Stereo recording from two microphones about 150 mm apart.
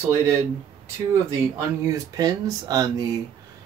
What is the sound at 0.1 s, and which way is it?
Speech, 15° right (ahead or behind).